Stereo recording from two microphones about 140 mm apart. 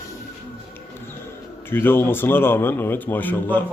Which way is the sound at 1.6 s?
15° left (ahead or behind).